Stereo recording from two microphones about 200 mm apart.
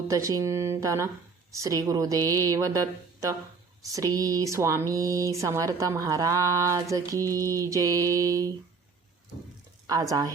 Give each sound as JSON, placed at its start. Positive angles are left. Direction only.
{"t": 0.1, "sound": "speech", "side_deg": -15}
{"t": 9.8, "sound": "speech", "side_deg": -15}